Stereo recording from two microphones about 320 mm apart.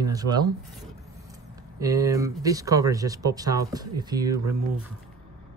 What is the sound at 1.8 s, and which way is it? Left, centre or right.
Speech, centre.